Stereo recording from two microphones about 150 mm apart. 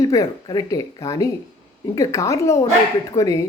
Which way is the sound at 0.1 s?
25° left (ahead or behind).